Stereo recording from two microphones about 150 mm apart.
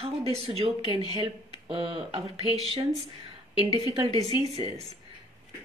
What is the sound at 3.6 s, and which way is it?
A woman's voice, 40° right (ahead or behind).